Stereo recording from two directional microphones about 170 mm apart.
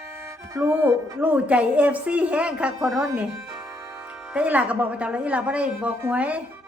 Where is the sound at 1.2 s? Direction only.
10° right (ahead or behind).